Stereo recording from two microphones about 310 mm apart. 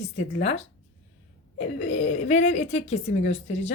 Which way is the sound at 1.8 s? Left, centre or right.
Left.